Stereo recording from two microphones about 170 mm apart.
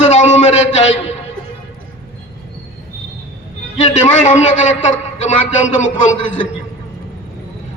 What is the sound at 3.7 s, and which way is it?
A man's voice, 45° left (ahead or behind).